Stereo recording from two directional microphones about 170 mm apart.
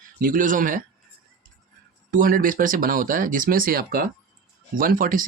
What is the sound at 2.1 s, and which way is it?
Speech, 55° right (ahead or behind).